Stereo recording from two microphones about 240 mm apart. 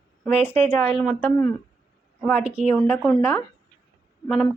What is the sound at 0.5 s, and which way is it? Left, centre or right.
Speech, right.